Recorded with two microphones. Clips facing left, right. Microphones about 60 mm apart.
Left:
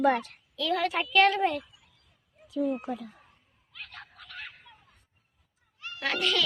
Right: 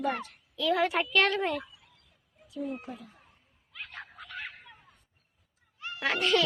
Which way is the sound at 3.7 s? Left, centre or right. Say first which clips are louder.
Right 2 dB; centre.